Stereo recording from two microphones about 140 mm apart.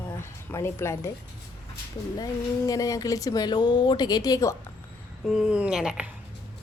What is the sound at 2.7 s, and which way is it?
Speech, 25° left (ahead or behind).